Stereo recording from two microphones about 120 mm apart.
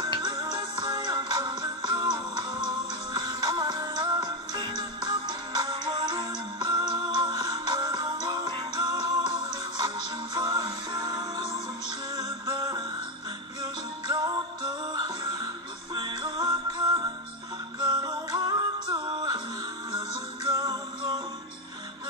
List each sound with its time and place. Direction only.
0.0 s music: 35° right (ahead or behind)